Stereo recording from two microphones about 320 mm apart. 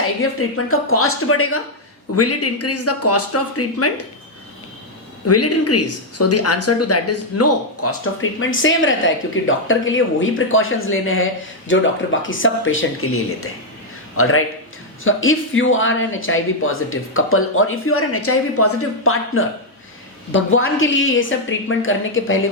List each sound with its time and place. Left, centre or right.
0.2 s speech: left
5.2 s speech: left